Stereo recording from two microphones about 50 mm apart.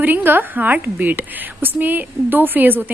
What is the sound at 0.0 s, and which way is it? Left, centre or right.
A woman's voice, right.